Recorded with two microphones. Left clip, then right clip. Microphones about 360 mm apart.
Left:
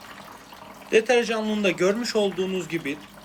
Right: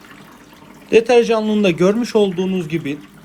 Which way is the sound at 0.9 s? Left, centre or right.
Centre.